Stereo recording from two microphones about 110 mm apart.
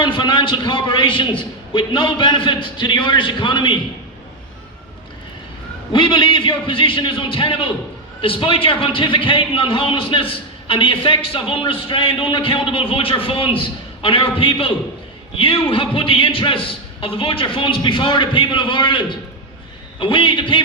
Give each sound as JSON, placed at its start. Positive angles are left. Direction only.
{"t": 0.0, "sound": "a man's voice", "side_deg": 45}
{"t": 5.9, "sound": "a man's voice", "side_deg": 45}